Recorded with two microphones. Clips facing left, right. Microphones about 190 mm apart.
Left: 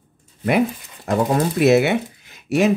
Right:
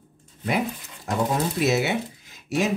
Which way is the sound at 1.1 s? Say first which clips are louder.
Left 6 dB; 60° left (ahead or behind).